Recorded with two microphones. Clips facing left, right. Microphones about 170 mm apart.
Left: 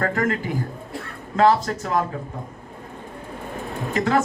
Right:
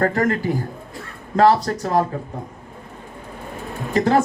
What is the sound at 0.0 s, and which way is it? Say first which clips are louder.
Speech: right 4 dB; 35° right (ahead or behind).